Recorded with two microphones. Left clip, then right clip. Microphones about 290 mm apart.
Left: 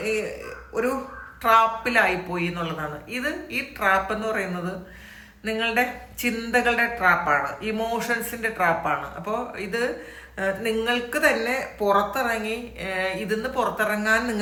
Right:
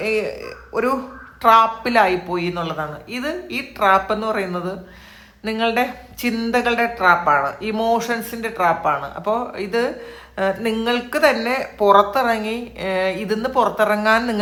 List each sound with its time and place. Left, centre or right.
1.4 s speech: centre